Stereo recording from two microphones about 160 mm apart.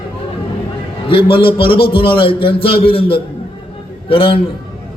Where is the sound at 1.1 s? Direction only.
35° left (ahead or behind).